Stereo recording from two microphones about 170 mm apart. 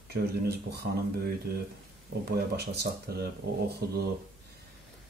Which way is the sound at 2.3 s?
75° right (ahead or behind).